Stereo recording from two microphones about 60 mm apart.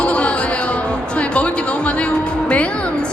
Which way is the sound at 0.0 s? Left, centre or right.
Centre.